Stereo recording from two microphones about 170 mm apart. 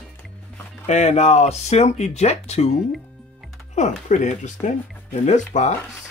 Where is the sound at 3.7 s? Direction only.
45° left (ahead or behind).